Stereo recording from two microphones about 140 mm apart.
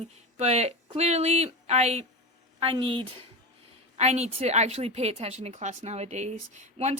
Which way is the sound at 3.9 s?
50° right (ahead or behind).